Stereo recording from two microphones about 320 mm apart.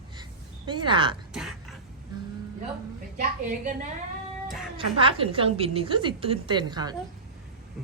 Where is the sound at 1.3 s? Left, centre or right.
Centre.